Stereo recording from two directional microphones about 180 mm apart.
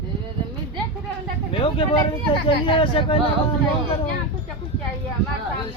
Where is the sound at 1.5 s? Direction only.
30° left (ahead or behind).